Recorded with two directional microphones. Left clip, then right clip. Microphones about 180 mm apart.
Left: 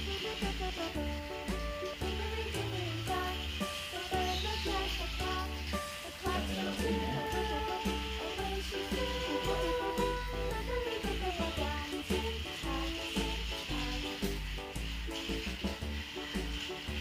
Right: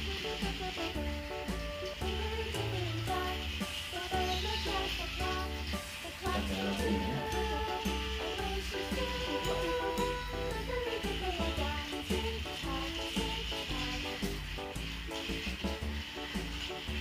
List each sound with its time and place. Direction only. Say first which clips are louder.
4.1 s music: even; centre (ahead or behind)
6.8 s music: even; centre (ahead or behind)